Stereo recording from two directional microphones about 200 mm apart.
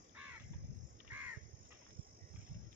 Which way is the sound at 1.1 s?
10° right (ahead or behind).